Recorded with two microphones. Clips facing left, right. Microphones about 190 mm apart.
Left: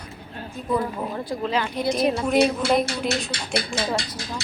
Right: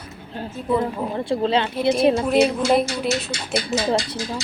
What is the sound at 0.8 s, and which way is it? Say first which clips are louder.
Speech: right 3 dB; 25° right (ahead or behind).